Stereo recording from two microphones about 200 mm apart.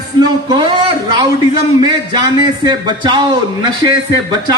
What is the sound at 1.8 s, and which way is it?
Speech, 20° right (ahead or behind).